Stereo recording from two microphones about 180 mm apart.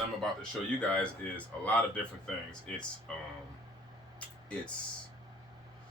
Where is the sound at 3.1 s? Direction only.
5° left (ahead or behind).